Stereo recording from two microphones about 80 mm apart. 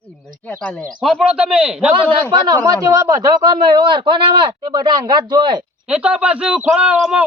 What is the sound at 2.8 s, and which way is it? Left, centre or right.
A man's voice, right.